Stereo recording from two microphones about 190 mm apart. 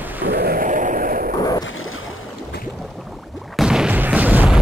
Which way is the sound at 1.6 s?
90° left.